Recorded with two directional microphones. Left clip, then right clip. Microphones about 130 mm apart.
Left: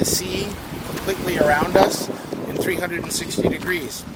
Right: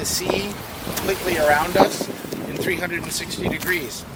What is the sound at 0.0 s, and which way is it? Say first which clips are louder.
Speech: even; 35° right (ahead or behind).